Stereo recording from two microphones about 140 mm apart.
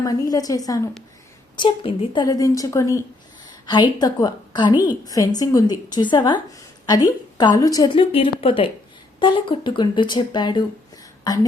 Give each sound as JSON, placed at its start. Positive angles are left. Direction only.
{"t": 0.0, "sound": "a woman's voice", "side_deg": 25}
{"t": 1.5, "sound": "speech", "side_deg": 40}
{"t": 2.2, "sound": "a woman's voice", "side_deg": 25}
{"t": 7.9, "sound": "speech", "side_deg": 40}